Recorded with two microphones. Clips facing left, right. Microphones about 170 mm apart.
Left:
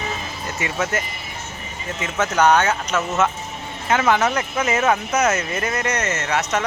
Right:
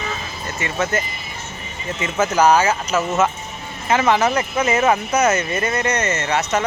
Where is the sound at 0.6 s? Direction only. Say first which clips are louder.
Right 2 dB; 5° left (ahead or behind).